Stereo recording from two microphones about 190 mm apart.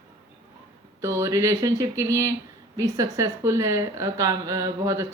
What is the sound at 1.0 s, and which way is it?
Speech, 15° right (ahead or behind).